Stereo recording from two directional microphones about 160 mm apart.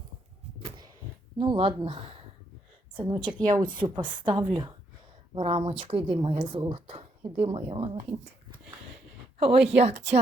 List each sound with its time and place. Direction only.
0.6 s a sound: 25° right (ahead or behind)
1.4 s a woman's voice: 30° right (ahead or behind)
9.4 s speech: 35° right (ahead or behind)